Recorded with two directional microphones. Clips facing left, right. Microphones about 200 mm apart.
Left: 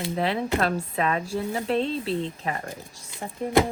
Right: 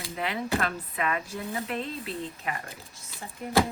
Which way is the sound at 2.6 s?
15° left (ahead or behind).